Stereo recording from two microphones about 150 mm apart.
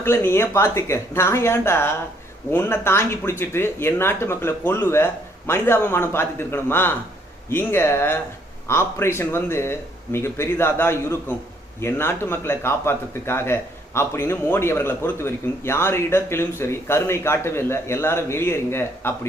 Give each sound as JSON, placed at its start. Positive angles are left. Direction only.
{"t": 0.0, "sound": "a man's voice", "side_deg": 15}